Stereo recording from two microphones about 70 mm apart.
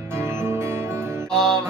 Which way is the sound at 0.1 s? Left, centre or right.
Right.